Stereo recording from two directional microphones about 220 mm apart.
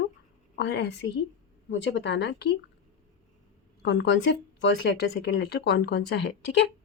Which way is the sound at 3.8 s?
55° left (ahead or behind).